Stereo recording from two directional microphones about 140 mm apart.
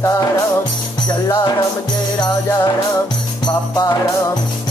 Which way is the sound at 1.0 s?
30° left (ahead or behind).